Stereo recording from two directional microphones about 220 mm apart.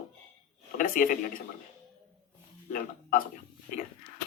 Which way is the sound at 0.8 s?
40° left (ahead or behind).